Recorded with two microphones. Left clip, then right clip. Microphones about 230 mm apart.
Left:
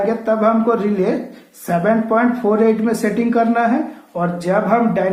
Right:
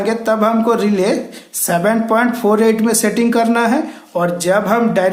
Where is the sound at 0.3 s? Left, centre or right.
Right.